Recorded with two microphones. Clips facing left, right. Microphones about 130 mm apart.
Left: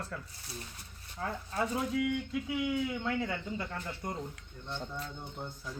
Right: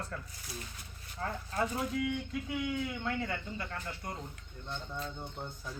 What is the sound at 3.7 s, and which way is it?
Speech, 20° left (ahead or behind).